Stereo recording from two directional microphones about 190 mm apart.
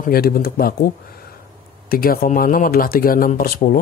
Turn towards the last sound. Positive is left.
turn(degrees=45)  # may be behind; listen again after turning